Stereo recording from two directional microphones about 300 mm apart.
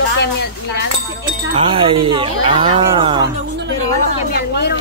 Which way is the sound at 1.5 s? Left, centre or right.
Centre.